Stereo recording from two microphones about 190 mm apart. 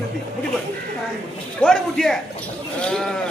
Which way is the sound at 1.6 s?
5° left (ahead or behind).